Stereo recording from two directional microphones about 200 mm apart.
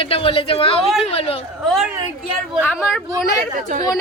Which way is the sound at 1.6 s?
Centre (ahead or behind).